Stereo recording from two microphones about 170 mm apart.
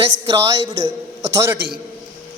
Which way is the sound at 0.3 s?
20° right (ahead or behind).